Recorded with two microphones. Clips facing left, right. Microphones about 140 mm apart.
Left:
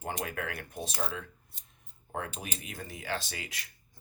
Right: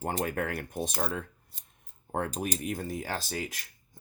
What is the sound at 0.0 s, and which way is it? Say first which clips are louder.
Speech: right 5 dB; 45° right (ahead or behind).